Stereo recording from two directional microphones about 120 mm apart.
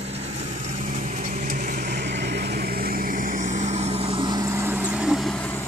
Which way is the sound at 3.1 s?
90° right.